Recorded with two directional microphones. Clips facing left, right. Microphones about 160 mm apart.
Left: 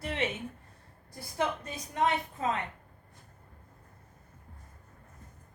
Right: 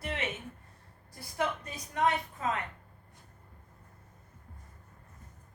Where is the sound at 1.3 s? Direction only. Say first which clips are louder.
Left 1 dB; 25° left (ahead or behind).